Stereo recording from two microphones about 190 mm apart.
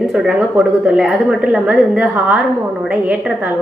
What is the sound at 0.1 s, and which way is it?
A woman's voice, 5° right (ahead or behind).